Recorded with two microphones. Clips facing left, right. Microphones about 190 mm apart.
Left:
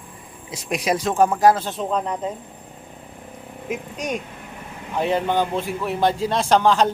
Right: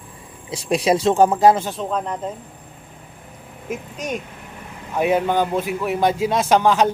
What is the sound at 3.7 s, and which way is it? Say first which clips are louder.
A man's voice: even; 5° right (ahead or behind).